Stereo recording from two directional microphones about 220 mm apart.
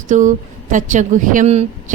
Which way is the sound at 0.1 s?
35° right (ahead or behind).